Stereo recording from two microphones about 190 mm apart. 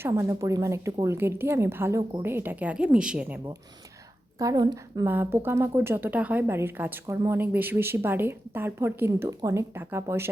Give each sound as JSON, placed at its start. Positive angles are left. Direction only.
{"t": 0.0, "sound": "a woman's voice", "side_deg": -15}